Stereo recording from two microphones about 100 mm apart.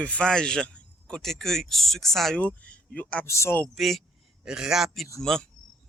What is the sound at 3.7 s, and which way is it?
Speech, centre (ahead or behind).